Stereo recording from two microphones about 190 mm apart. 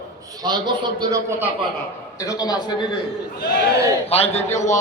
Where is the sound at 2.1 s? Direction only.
15° left (ahead or behind).